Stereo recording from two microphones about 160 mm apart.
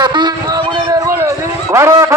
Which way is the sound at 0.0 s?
25° right (ahead or behind).